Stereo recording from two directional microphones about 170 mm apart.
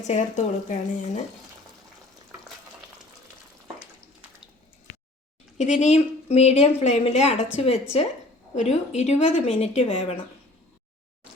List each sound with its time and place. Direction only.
0.1 s speech: 45° left (ahead or behind)
5.5 s a woman's voice: 40° left (ahead or behind)